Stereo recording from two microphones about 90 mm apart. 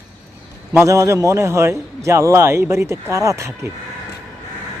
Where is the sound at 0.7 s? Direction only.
30° right (ahead or behind).